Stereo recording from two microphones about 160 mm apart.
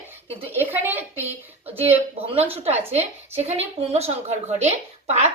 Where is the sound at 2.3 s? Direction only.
40° right (ahead or behind).